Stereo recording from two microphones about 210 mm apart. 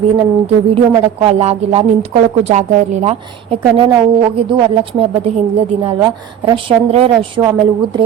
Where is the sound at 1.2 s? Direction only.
30° right (ahead or behind).